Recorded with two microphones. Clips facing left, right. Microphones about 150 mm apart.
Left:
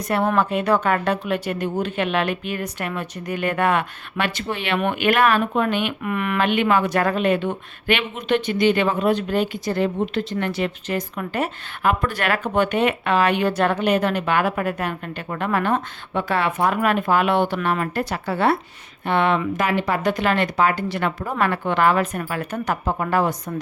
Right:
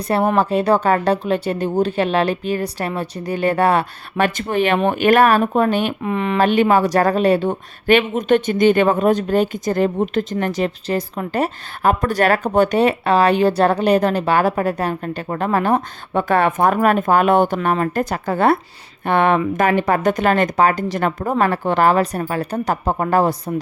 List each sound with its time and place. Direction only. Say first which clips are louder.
0.3 s speech: right 4 dB; 35° right (ahead or behind)
4.4 s speech: right 6 dB; 45° right (ahead or behind)
6.0 s speech: right 4 dB; 25° right (ahead or behind)
6.4 s speech: right 5 dB; 40° right (ahead or behind)
16.1 s speech: right 5 dB; 50° right (ahead or behind)